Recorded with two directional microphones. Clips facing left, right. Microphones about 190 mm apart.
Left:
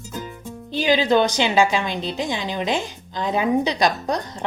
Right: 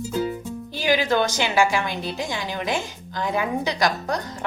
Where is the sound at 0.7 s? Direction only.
20° left (ahead or behind).